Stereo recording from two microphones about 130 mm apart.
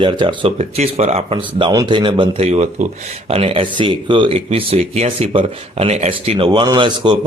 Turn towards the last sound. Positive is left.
turn(degrees=-35)  # may be behind; listen again after turning